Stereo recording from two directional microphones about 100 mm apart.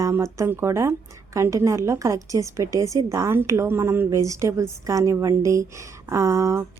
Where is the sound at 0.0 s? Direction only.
30° right (ahead or behind).